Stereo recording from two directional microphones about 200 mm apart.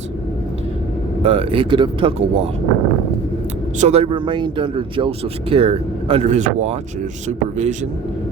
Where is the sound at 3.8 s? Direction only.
30° right (ahead or behind).